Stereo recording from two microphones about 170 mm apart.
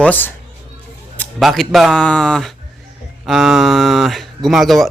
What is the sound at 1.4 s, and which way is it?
Speech, centre (ahead or behind).